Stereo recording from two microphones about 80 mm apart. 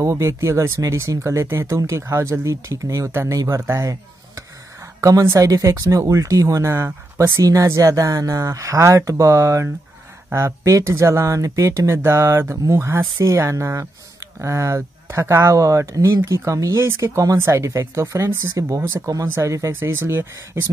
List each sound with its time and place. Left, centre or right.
0.0 s speech: right
19.7 s speech: right